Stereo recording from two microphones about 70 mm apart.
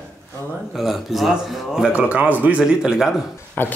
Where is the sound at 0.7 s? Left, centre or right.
Centre.